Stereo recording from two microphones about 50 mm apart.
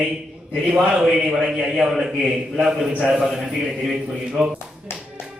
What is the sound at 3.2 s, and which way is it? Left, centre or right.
Speech, centre.